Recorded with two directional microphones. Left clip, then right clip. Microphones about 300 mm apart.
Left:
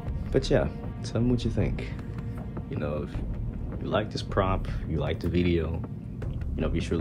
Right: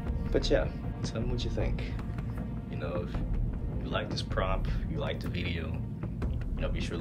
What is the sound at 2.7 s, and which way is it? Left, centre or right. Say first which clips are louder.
Speech: left 4 dB; left.